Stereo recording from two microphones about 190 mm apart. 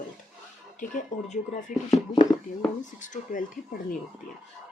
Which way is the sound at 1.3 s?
40° left (ahead or behind).